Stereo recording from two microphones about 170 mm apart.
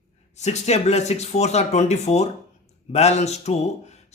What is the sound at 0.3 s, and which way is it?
A man's voice, 45° left (ahead or behind).